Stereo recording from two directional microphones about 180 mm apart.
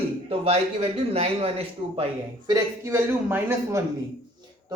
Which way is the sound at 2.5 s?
15° right (ahead or behind).